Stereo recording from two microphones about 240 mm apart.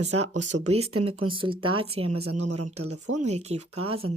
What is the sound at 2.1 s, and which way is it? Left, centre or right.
Speech, right.